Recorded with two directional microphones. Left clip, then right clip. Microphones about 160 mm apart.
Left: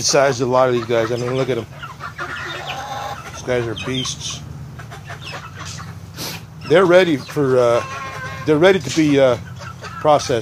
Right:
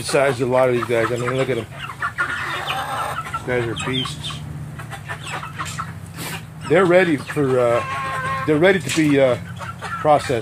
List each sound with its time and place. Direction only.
0.0 s speech: 15° left (ahead or behind)
3.4 s speech: 15° left (ahead or behind)
6.7 s speech: 15° left (ahead or behind)